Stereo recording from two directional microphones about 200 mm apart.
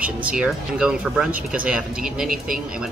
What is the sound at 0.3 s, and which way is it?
Speech, 5° right (ahead or behind).